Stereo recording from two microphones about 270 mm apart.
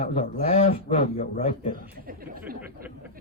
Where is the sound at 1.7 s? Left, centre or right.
Right.